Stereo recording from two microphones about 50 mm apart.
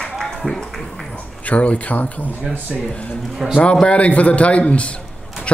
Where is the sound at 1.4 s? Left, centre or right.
Left.